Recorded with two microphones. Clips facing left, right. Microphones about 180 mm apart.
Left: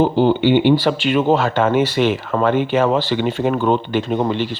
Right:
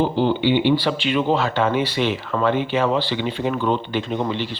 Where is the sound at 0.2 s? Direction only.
45° left (ahead or behind).